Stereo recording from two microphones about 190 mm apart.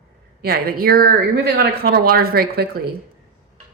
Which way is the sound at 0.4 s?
55° right (ahead or behind).